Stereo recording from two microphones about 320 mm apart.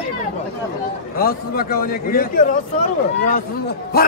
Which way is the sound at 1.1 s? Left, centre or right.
Left.